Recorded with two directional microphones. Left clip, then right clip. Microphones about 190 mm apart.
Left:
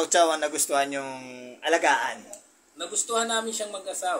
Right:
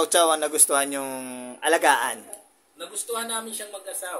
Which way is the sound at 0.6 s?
35° right (ahead or behind).